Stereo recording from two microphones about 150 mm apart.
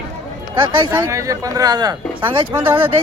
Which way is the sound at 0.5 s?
30° right (ahead or behind).